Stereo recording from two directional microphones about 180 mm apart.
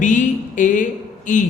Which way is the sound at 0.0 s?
45° left (ahead or behind).